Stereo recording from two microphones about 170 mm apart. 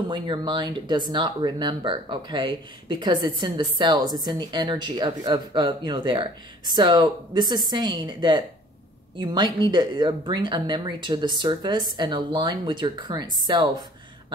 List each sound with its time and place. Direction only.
0.1 s speech: 25° right (ahead or behind)